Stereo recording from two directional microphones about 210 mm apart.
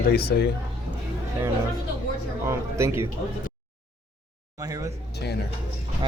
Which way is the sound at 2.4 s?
15° right (ahead or behind).